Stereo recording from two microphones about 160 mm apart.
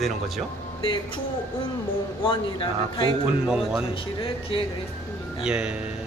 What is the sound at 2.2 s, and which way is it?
Speech, 30° left (ahead or behind).